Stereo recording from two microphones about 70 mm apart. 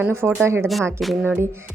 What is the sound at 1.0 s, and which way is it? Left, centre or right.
Speech, centre.